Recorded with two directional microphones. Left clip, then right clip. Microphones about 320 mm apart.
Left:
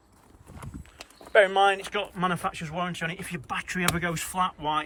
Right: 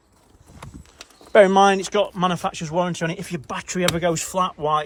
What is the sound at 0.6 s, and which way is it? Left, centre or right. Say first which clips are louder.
Clip-clop: right 3 dB; centre.